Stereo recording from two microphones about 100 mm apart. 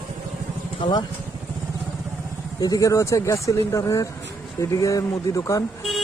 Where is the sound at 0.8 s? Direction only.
45° left (ahead or behind).